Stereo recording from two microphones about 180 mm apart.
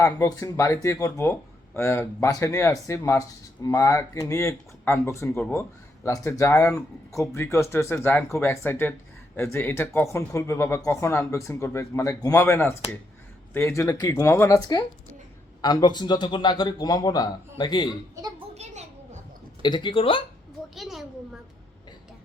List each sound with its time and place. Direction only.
0.0 s a man's voice: 15° left (ahead or behind)
18.5 s a sound: 40° right (ahead or behind)
19.6 s a man's voice: 25° left (ahead or behind)
20.7 s a woman's voice: centre (ahead or behind)